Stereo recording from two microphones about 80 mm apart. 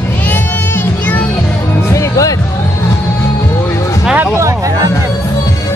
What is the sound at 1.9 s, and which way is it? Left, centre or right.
Music, left.